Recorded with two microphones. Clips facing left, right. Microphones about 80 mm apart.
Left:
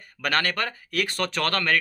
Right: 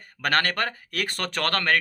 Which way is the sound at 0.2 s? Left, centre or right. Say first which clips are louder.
Right 1 dB; right.